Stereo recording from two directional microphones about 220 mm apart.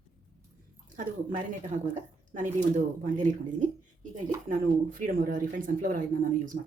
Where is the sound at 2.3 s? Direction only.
35° right (ahead or behind).